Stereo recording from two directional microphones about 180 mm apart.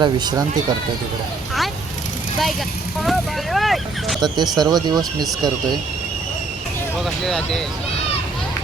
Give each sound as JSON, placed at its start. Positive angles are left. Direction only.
{"t": 0.0, "sound": "speech", "side_deg": -25}
{"t": 3.0, "sound": "speech", "side_deg": 0}
{"t": 4.2, "sound": "speech", "side_deg": -25}
{"t": 7.0, "sound": "speech", "side_deg": 0}